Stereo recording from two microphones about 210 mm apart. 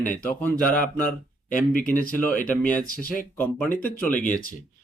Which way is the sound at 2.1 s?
5° left (ahead or behind).